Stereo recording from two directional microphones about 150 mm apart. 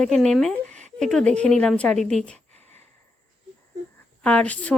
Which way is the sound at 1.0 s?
5° left (ahead or behind).